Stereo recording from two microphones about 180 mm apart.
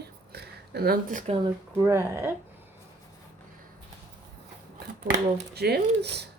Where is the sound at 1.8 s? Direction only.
15° right (ahead or behind).